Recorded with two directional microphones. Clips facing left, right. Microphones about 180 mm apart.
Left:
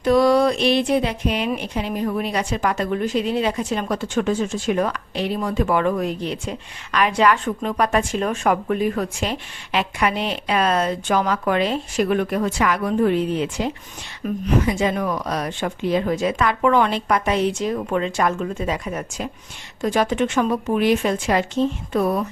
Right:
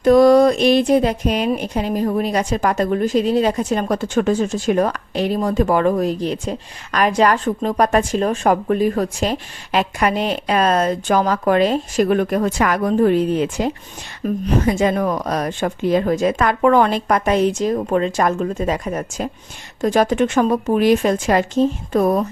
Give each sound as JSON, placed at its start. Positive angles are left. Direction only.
{"t": 0.0, "sound": "speech", "side_deg": -45}